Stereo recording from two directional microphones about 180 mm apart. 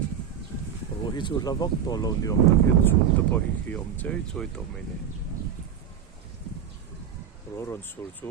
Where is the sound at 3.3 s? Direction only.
10° left (ahead or behind).